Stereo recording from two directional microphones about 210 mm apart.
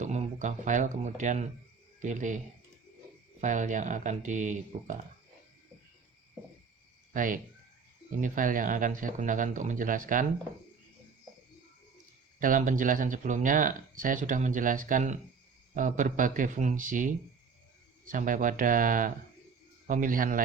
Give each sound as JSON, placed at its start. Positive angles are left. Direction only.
{"t": 0.0, "sound": "speech", "side_deg": -35}
{"t": 3.4, "sound": "speech", "side_deg": -35}
{"t": 7.1, "sound": "speech", "side_deg": -40}
{"t": 12.4, "sound": "speech", "side_deg": -40}